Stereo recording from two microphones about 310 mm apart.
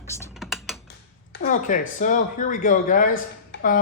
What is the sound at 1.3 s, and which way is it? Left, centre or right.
Speech, left.